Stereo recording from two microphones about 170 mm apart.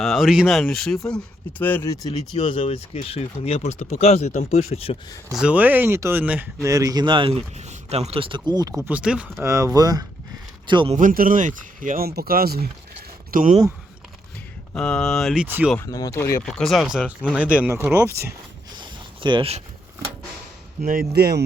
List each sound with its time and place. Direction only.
0.0 s speech: centre (ahead or behind); by 2.0 s 20° left (ahead or behind)
2.3 s speech: 30° left (ahead or behind)
5.3 s speech: 5° right (ahead or behind)
9.5 s speech: 20° right (ahead or behind)
10.9 s speech: 55° right (ahead or behind)
13.3 s speech: 50° right (ahead or behind)
14.8 s speech: 5° left (ahead or behind)
15.4 s speech: 10° right (ahead or behind)
15.8 s speech: 20° left (ahead or behind)
16.4 s speech: centre (ahead or behind)
18.8 s zipper: 25° right (ahead or behind)
20.8 s speech: 60° right (ahead or behind)